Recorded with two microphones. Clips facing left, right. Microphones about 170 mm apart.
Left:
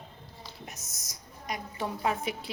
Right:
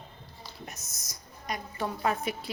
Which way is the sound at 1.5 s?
15° left (ahead or behind).